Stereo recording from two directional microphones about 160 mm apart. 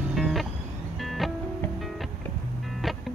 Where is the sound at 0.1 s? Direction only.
Centre (ahead or behind).